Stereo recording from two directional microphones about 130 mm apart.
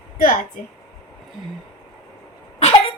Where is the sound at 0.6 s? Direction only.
80° left.